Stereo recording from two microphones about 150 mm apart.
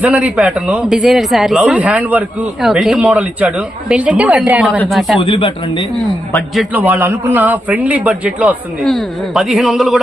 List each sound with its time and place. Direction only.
0.0 s a man's voice: 10° right (ahead or behind)
5.2 s speech: 35° left (ahead or behind)
6.7 s speech: 15° right (ahead or behind)
8.8 s a man's voice: centre (ahead or behind)